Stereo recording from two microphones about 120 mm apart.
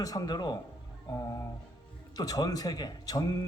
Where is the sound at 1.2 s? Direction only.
25° left (ahead or behind).